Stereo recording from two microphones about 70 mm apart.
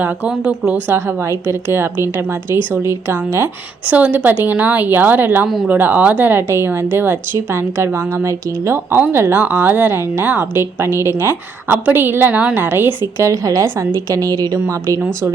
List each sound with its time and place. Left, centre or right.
0.0 s speech: right
0.3 s speech: centre
0.9 s a woman's voice: right
3.8 s a woman's voice: right
8.7 s a woman's voice: right
13.1 s a woman's voice: right